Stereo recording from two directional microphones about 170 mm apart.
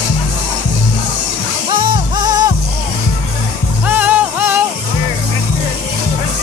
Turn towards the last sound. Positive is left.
turn(degrees=-10)  # may be behind; listen again after turning